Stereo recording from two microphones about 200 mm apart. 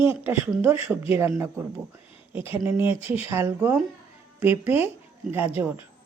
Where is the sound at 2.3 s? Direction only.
10° right (ahead or behind).